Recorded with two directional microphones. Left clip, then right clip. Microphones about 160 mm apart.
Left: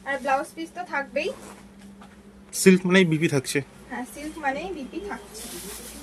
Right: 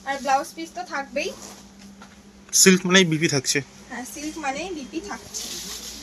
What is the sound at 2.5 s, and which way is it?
Speech, 10° left (ahead or behind).